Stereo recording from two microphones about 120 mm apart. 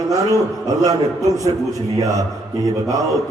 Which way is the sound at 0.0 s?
30° right (ahead or behind).